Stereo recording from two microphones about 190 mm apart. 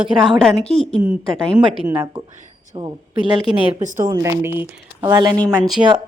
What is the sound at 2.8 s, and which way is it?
A woman's voice, 25° right (ahead or behind).